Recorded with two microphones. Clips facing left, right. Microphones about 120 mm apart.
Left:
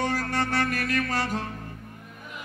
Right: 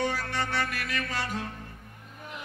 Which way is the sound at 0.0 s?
45° left (ahead or behind).